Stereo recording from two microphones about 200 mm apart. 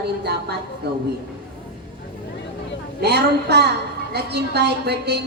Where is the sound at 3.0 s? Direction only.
55° right (ahead or behind).